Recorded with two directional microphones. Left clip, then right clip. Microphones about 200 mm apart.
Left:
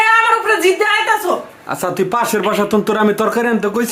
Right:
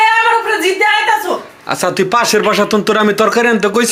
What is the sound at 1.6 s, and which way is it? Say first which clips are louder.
Speech: right 6 dB; centre (ahead or behind).